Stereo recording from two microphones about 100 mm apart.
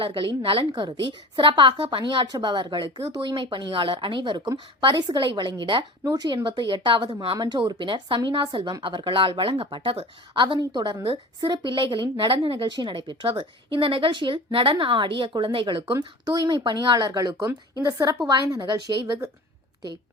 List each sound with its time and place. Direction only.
0.0 s a woman's voice: 65° right (ahead or behind)
10.4 s a woman's voice: 45° right (ahead or behind)
16.0 s a woman's voice: 45° right (ahead or behind)